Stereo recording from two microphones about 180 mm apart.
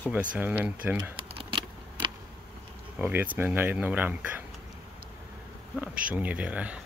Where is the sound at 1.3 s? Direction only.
30° right (ahead or behind).